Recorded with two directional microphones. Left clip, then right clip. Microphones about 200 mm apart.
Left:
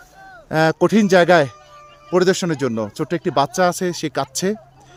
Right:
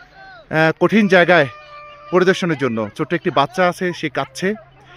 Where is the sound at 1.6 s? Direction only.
60° right (ahead or behind).